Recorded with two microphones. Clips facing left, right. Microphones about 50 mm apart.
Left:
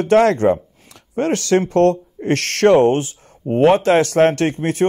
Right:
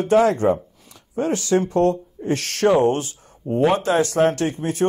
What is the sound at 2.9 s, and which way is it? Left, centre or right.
Speech, left.